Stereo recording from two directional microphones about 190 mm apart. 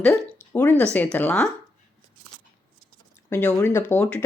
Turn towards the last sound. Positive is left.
turn(degrees=10)  # may be behind; listen again after turning